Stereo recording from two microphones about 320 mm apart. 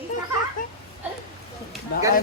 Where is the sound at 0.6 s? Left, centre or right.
Left.